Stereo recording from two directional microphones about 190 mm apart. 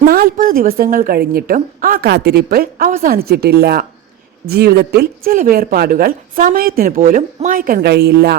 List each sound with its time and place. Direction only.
0.0 s speech: 50° right (ahead or behind)